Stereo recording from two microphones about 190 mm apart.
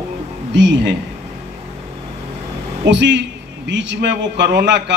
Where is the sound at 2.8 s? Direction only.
70° right (ahead or behind).